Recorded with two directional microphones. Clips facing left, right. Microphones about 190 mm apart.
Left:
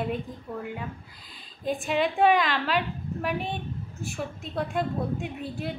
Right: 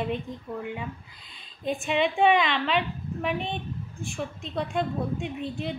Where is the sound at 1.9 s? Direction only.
5° left (ahead or behind).